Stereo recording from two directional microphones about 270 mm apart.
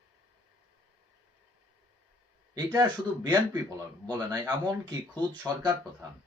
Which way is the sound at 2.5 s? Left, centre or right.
Centre.